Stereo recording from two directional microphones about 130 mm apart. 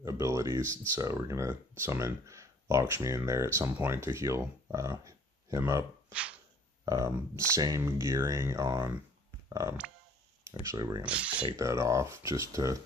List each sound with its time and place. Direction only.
0.0 s speech: 25° right (ahead or behind)
6.1 s a sound: 10° right (ahead or behind)
6.8 s speech: 25° right (ahead or behind)
11.0 s speech: 10° right (ahead or behind)
11.5 s speech: 25° right (ahead or behind)